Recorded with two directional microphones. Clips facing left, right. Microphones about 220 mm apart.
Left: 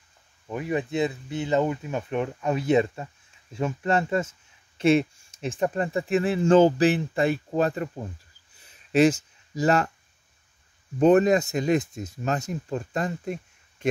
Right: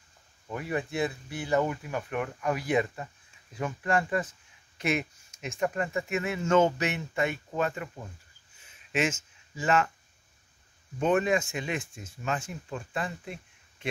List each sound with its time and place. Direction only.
0.5 s speech: 20° left (ahead or behind); by 8.1 s 35° left (ahead or behind)
8.5 s a sound: 35° left (ahead or behind)
11.0 s speech: 40° left (ahead or behind)